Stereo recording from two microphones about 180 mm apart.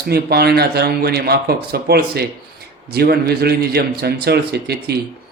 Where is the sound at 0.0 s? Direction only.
60° right (ahead or behind).